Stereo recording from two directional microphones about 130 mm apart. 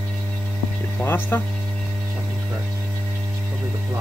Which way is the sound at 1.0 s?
15° left (ahead or behind).